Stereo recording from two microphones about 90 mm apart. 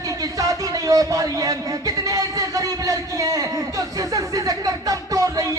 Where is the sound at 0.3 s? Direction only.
40° right (ahead or behind).